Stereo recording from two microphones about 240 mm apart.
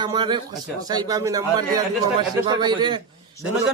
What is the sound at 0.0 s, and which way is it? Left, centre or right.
A man's voice, centre.